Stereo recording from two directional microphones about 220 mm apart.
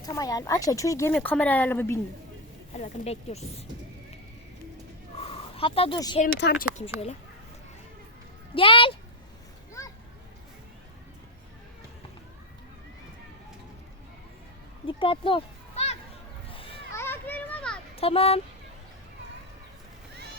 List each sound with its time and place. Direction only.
0.0 s speech: 15° left (ahead or behind)
2.7 s speech: 30° left (ahead or behind)
5.1 s a sound: 25° left (ahead or behind)
6.1 s speech: 40° left (ahead or behind)
8.5 s speech: 25° left (ahead or behind)
14.8 s children playing: 25° left (ahead or behind)
16.9 s children playing: 10° left (ahead or behind)
17.9 s a child's voice: 25° left (ahead or behind)